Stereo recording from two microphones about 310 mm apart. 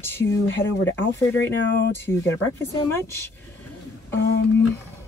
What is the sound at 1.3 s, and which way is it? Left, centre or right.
Speech, left.